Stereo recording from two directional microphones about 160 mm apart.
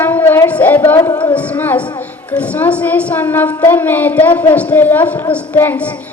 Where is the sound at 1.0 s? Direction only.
25° left (ahead or behind).